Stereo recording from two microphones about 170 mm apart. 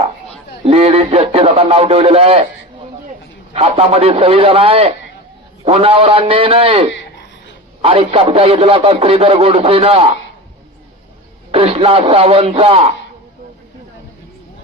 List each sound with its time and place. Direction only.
0.6 s a man's voice: 35° right (ahead or behind)
3.5 s a man's voice: 35° right (ahead or behind)
11.5 s a man's voice: 35° right (ahead or behind)